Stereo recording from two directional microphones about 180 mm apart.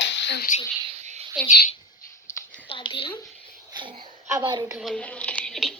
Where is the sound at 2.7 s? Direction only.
30° left (ahead or behind).